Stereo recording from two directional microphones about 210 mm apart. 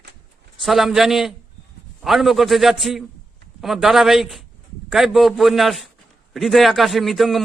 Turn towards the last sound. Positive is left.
turn(degrees=0)  # may be behind; listen again after turning